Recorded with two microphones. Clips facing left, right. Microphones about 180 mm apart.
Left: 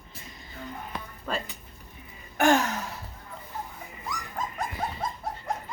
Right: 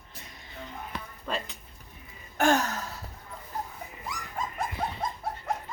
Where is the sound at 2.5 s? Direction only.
15° left (ahead or behind).